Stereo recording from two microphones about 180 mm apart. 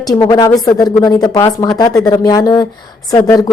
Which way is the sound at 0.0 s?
20° left (ahead or behind).